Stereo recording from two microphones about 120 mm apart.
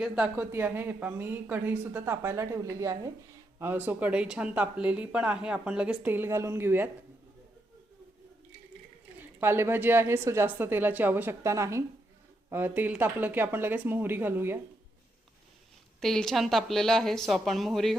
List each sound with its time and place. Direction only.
0.3 s a woman's voice: 15° right (ahead or behind)
3.6 s speech: 20° right (ahead or behind)
9.4 s a woman's voice: 20° right (ahead or behind)
16.0 s speech: 5° left (ahead or behind)